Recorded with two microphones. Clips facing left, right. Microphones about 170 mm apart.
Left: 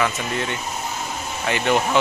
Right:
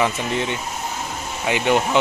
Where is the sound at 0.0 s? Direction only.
20° right (ahead or behind).